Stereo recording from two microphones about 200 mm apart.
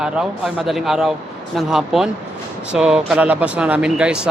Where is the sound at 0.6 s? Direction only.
Centre (ahead or behind).